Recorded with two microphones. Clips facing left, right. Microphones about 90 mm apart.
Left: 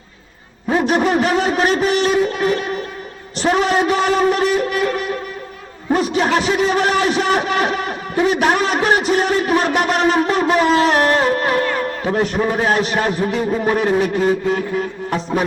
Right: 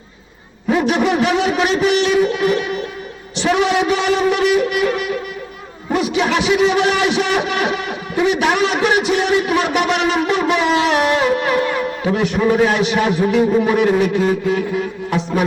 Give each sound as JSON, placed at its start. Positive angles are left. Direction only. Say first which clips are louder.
{"t": 0.7, "sound": "speech", "louder": "even", "side_deg": 35}